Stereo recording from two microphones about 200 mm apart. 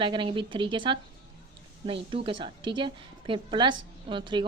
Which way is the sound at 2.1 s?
25° right (ahead or behind).